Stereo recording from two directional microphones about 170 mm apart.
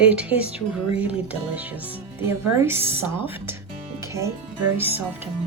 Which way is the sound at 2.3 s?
15° right (ahead or behind).